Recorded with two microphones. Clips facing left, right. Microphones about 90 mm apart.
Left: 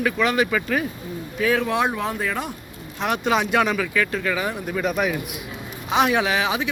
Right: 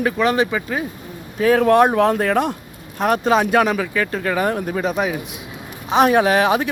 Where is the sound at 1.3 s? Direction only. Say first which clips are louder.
Right 8 dB; 40° right (ahead or behind); by 2.5 s 60° right (ahead or behind).